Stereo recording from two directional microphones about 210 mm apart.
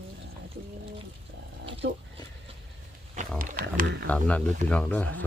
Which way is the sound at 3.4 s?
40° right (ahead or behind).